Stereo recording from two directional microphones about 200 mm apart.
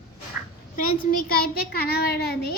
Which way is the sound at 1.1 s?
45° left (ahead or behind).